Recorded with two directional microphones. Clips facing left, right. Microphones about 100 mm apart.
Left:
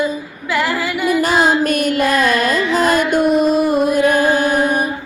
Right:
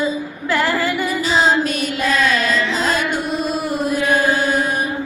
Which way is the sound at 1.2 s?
55° left (ahead or behind).